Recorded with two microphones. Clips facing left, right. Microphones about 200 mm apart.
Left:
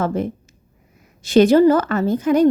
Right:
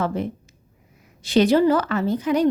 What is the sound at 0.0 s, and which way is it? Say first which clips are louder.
A woman's voice: left 3 dB; 45° left (ahead or behind).